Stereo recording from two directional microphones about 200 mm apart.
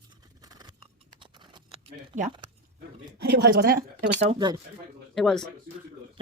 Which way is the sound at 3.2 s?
50° right (ahead or behind).